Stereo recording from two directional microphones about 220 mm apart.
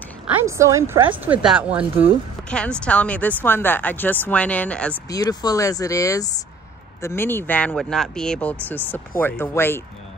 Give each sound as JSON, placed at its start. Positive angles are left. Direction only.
{"t": 0.6, "sound": "a woman's voice", "side_deg": -15}
{"t": 2.5, "sound": "speech", "side_deg": 5}
{"t": 5.1, "sound": "speech", "side_deg": 15}